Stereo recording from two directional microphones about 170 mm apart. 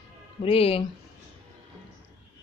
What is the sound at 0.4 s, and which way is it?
Speech, 35° left (ahead or behind).